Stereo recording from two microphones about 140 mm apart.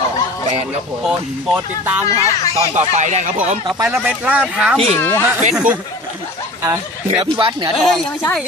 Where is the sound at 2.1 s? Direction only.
50° right (ahead or behind).